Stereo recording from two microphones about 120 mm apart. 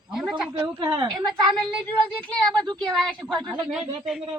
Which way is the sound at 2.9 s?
Centre (ahead or behind).